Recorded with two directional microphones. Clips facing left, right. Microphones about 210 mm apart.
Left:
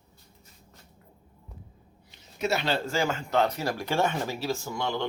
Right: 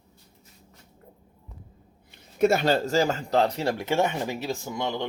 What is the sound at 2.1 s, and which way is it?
Speech, 50° right (ahead or behind).